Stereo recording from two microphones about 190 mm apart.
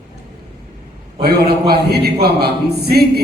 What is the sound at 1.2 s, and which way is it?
A man's voice, 55° right (ahead or behind).